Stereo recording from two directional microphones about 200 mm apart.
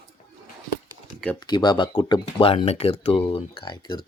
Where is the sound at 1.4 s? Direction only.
20° left (ahead or behind).